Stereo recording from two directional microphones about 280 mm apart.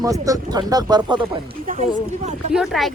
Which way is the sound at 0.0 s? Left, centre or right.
Centre.